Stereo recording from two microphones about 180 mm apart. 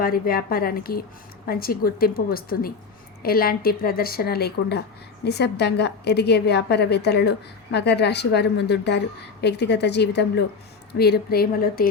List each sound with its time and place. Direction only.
0.0 s a woman's voice: 55° left (ahead or behind)